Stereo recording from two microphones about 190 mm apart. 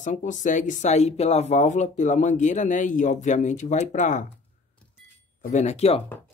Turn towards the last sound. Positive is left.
turn(degrees=35)  # may be behind; listen again after turning